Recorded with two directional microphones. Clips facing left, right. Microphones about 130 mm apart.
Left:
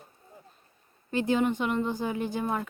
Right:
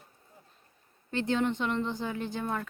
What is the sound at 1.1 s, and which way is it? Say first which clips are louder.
Speech: left 3 dB; 10° left (ahead or behind).